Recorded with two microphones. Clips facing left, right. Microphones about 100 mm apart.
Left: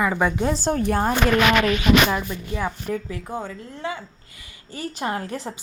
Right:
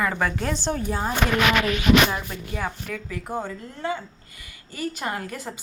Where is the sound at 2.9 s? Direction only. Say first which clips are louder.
Left 6 dB; 20° left (ahead or behind).